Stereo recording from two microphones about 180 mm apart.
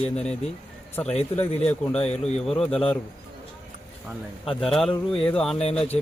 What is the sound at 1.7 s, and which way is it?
Speech, 5° left (ahead or behind).